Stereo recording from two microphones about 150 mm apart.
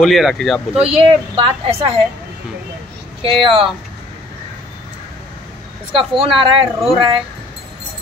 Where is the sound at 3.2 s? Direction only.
35° right (ahead or behind).